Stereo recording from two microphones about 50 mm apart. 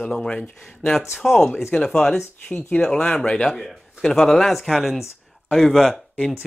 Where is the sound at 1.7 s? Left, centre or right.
Left.